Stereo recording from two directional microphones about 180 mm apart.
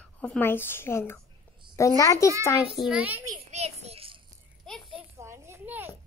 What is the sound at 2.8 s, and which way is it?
Speech, 5° right (ahead or behind).